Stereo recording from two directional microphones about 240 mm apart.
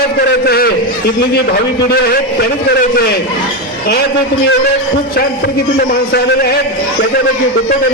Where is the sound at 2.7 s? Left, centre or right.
Left.